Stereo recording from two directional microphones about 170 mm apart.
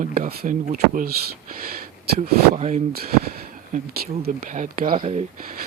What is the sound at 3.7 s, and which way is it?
Speech, 50° right (ahead or behind).